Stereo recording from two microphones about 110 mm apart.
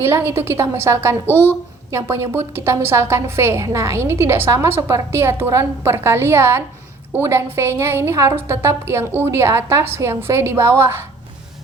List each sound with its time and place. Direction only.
0.0 s a woman's voice: 25° right (ahead or behind)
1.3 s a woman's voice: 20° left (ahead or behind)
1.9 s a woman's voice: 25° right (ahead or behind)